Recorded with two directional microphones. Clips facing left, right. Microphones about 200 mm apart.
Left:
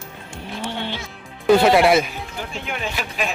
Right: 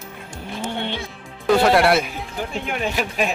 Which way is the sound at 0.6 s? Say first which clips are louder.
Right 2 dB; 25° right (ahead or behind).